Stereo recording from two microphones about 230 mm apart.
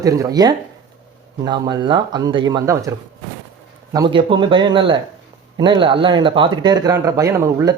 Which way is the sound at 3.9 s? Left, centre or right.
Centre.